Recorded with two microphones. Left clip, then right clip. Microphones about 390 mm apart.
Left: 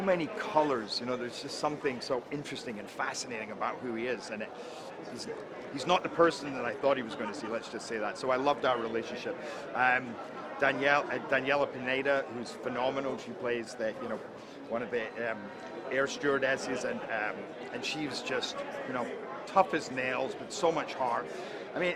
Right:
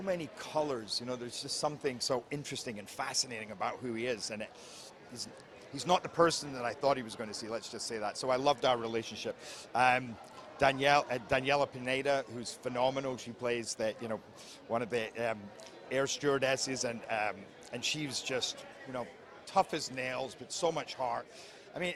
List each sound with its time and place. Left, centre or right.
0.1 s speech: right
5.7 s speech: right
9.7 s a man's voice: right
10.6 s a man's voice: right
15.9 s a man's voice: right
17.7 s a man's voice: right
19.5 s speech: right